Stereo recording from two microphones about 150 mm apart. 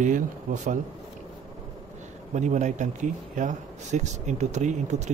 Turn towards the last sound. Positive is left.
turn(degrees=-50)  # may be behind; listen again after turning